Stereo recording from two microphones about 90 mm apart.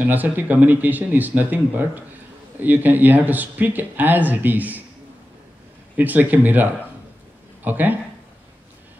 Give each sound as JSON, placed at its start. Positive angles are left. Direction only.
{"t": 0.0, "sound": "speech", "side_deg": -20}
{"t": 5.9, "sound": "speech", "side_deg": -20}